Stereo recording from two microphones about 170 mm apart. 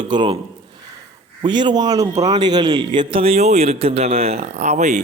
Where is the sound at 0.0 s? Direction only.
30° right (ahead or behind).